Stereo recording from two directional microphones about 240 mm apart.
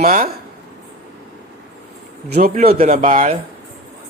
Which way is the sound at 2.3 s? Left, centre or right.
Right.